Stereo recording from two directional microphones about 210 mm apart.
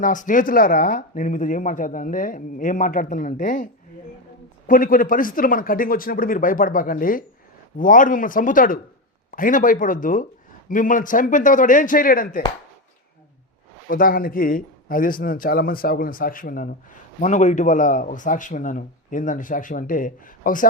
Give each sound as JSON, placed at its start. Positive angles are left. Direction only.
{"t": 0.0, "sound": "speech", "side_deg": 40}
{"t": 13.8, "sound": "speech", "side_deg": 45}